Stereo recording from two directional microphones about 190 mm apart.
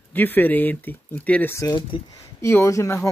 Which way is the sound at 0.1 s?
10° left (ahead or behind).